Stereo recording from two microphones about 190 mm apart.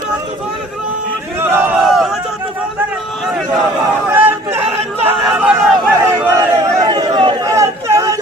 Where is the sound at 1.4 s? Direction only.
10° right (ahead or behind).